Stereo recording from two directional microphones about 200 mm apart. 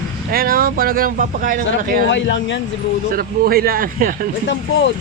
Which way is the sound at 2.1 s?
65° left (ahead or behind).